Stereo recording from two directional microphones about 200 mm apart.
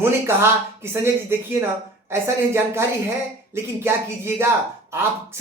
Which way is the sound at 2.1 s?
10° right (ahead or behind).